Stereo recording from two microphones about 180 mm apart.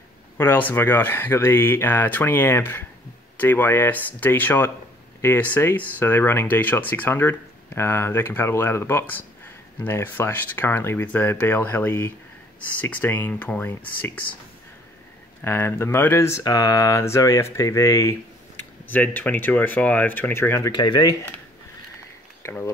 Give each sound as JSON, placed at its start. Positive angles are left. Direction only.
{"t": 0.4, "sound": "speech", "side_deg": 10}
{"t": 15.4, "sound": "speech", "side_deg": 15}
{"t": 22.4, "sound": "speech", "side_deg": 15}